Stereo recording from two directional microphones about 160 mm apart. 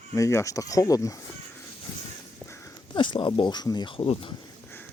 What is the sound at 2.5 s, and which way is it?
Speech, 30° left (ahead or behind).